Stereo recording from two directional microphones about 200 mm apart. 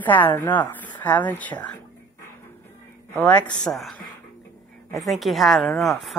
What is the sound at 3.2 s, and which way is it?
Speech, 5° left (ahead or behind).